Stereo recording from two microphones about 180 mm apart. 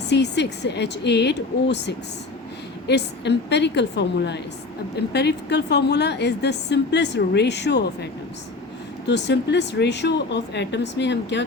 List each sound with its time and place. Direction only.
0.1 s a woman's voice: 70° left (ahead or behind)
9.0 s a woman's voice: 75° left (ahead or behind)